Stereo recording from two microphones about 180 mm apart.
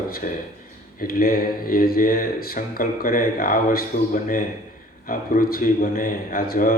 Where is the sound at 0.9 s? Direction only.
55° left (ahead or behind).